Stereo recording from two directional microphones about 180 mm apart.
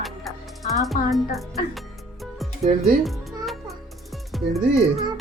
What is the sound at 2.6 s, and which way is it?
Speech, 45° right (ahead or behind).